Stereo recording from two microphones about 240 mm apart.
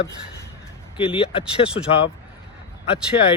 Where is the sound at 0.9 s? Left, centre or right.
Left.